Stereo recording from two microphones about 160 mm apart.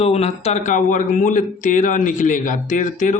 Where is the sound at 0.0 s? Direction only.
40° left (ahead or behind).